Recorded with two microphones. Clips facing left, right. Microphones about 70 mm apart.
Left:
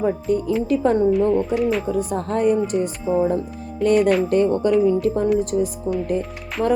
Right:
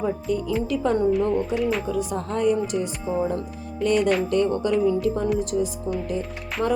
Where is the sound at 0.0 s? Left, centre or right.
Left.